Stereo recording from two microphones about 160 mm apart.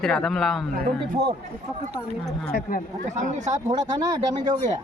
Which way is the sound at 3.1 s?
50° right (ahead or behind).